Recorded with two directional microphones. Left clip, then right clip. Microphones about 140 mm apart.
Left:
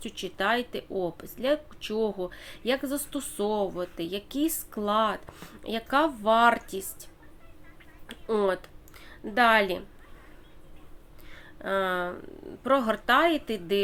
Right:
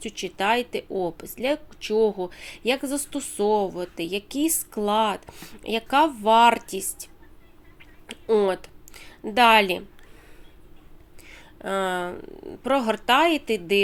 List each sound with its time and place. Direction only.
0.0 s a woman's voice: 10° right (ahead or behind)
8.0 s a sound: 15° right (ahead or behind)
11.3 s a woman's voice: 15° right (ahead or behind)